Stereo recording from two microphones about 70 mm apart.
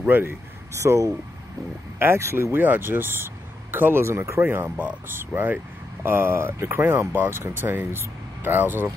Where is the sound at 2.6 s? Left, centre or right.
Right.